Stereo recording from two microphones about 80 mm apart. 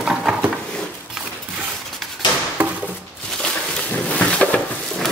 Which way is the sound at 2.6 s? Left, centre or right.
Centre.